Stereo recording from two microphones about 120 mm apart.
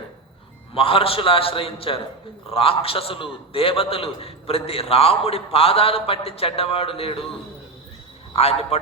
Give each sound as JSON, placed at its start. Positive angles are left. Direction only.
{"t": 0.7, "sound": "a man's voice", "side_deg": 50}
{"t": 8.4, "sound": "a man's voice", "side_deg": 60}